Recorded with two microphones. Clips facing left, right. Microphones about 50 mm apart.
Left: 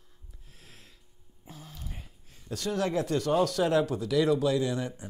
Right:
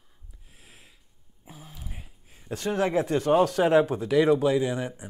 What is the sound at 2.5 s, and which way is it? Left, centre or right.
Speech, right.